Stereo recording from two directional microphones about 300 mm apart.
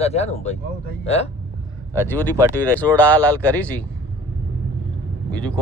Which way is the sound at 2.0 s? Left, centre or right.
Centre.